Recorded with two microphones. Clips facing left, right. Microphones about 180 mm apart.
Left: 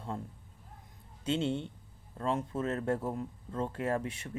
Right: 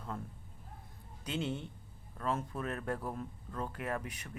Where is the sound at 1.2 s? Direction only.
30° left (ahead or behind).